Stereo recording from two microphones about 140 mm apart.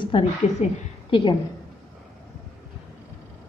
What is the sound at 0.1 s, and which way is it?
Speech, 40° left (ahead or behind).